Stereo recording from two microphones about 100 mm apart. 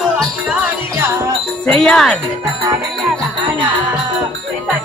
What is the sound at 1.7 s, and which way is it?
Speech, 5° left (ahead or behind).